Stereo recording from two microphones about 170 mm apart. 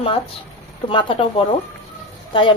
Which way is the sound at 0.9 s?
30° left (ahead or behind).